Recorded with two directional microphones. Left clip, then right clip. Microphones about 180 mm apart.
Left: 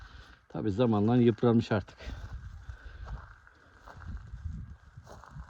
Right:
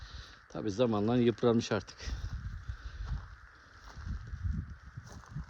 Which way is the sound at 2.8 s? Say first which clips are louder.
Left 3 dB; 20° right (ahead or behind).